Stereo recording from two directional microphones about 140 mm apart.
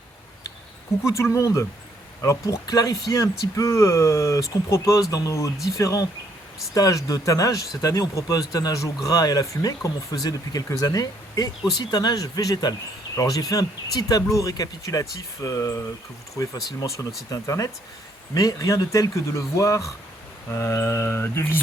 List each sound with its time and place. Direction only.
1.0 s speech: 20° left (ahead or behind)